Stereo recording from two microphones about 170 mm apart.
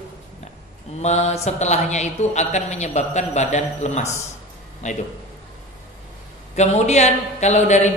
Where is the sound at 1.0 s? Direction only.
40° left (ahead or behind).